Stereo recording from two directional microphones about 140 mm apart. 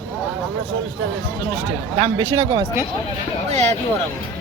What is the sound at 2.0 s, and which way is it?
Speech, 35° right (ahead or behind).